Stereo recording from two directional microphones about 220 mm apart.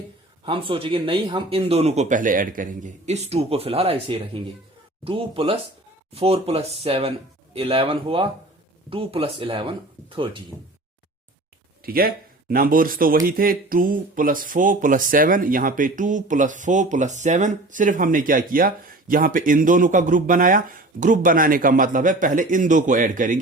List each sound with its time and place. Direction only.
0.4 s speech: 25° right (ahead or behind)
11.9 s speech: 40° right (ahead or behind)